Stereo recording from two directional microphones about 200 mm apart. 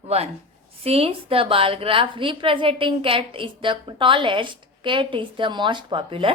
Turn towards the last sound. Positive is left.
turn(degrees=-25)  # may be behind; listen again after turning